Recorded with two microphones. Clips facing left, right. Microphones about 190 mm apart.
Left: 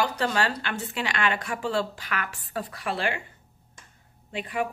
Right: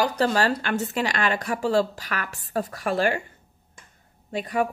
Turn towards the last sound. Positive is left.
turn(degrees=-40)  # may be behind; listen again after turning